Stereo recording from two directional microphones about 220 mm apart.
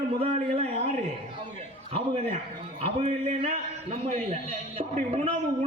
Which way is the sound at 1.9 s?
30° right (ahead or behind).